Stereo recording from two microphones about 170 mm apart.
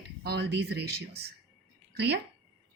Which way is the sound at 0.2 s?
70° right (ahead or behind).